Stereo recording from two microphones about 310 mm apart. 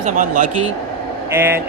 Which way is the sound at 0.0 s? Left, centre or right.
Right.